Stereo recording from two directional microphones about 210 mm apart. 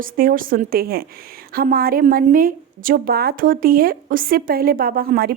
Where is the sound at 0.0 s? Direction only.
40° right (ahead or behind).